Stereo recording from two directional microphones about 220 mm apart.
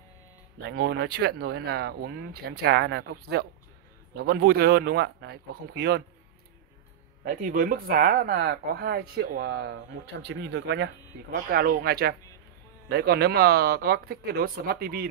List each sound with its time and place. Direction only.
0.7 s speech: 50° right (ahead or behind)
7.2 s speech: 40° right (ahead or behind)
11.3 s speech: 45° right (ahead or behind)